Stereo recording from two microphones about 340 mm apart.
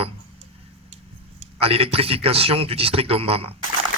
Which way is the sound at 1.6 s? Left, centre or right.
Centre.